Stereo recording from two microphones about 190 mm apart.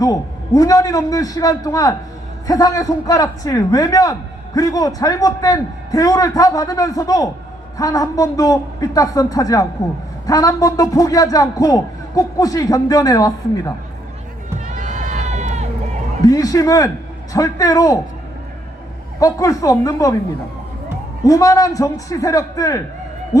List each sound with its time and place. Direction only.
0.0 s a man's voice: 20° left (ahead or behind)
14.7 s run: 40° right (ahead or behind)
16.2 s a man's voice: 20° left (ahead or behind)
19.2 s a man's voice: 20° left (ahead or behind)
21.2 s a man's voice: 15° left (ahead or behind)